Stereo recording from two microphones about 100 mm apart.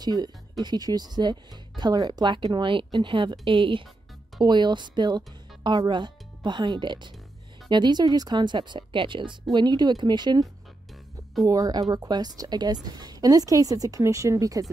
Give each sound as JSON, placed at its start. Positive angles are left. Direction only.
{"t": 0.0, "sound": "speech", "side_deg": -45}
{"t": 4.4, "sound": "speech", "side_deg": -50}
{"t": 11.4, "sound": "a woman's voice", "side_deg": -35}